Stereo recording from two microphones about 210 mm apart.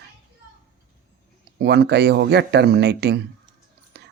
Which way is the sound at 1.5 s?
50° right (ahead or behind).